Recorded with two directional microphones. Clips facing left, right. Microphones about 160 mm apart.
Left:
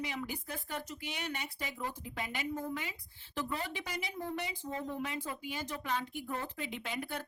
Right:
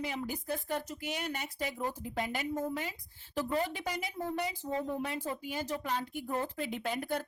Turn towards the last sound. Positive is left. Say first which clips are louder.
# right 5 dB
turn(degrees=-40)  # may be behind; listen again after turning